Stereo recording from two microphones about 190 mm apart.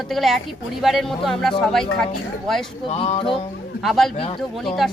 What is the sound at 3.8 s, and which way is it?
Speech, centre (ahead or behind).